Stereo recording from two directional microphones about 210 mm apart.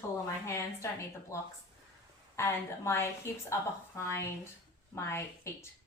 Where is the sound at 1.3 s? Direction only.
15° left (ahead or behind).